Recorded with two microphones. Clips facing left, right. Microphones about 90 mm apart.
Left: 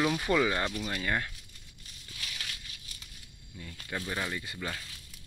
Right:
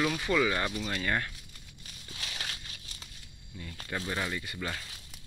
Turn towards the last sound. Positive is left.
turn(degrees=15)  # may be behind; listen again after turning